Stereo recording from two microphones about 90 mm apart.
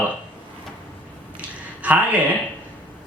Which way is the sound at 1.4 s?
15° right (ahead or behind).